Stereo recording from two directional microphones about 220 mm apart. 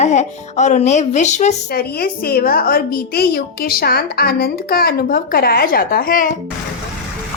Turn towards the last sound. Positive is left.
turn(degrees=40)  # may be behind; listen again after turning